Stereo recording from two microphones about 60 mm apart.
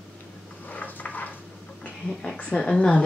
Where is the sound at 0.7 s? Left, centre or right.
Left.